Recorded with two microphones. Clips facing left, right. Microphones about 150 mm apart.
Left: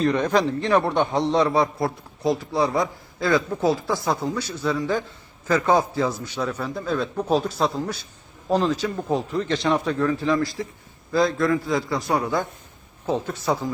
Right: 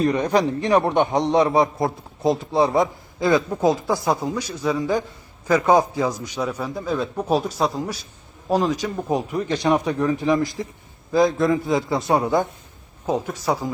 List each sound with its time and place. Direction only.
0.0 s a man's voice: 10° right (ahead or behind)